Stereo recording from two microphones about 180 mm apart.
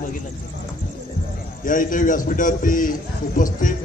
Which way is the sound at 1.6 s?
45° left (ahead or behind).